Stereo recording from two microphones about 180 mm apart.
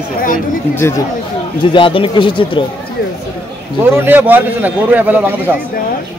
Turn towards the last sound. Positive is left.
turn(degrees=-10)  # may be behind; listen again after turning